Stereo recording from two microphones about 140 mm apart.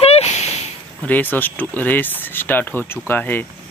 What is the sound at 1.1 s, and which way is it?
Speech, 15° left (ahead or behind).